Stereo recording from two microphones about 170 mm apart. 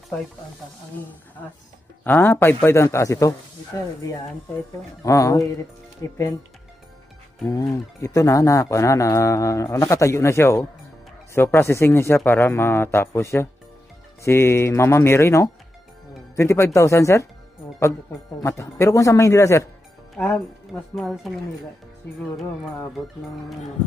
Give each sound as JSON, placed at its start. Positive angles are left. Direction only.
{"t": 2.0, "sound": "speech", "side_deg": 10}
{"t": 5.0, "sound": "speech", "side_deg": 20}
{"t": 7.4, "sound": "speech", "side_deg": 20}
{"t": 18.4, "sound": "speech", "side_deg": 15}
{"t": 20.9, "sound": "speech", "side_deg": 0}